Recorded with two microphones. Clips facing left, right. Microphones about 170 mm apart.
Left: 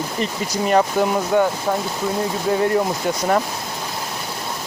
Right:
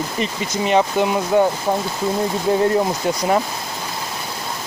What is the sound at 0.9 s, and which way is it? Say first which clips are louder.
Speech: right 1 dB; 15° right (ahead or behind).